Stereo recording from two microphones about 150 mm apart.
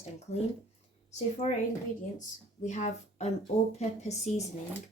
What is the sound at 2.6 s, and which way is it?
Speech, 50° left (ahead or behind).